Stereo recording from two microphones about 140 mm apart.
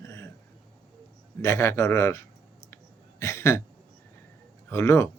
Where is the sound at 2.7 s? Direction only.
20° left (ahead or behind).